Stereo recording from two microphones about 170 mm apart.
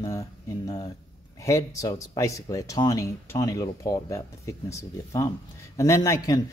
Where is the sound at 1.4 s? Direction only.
20° left (ahead or behind).